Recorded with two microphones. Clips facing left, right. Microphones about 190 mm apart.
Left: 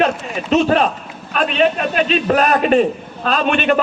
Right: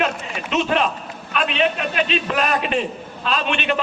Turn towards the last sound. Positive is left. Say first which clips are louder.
# left 6 dB
turn(degrees=45)  # may be behind; listen again after turning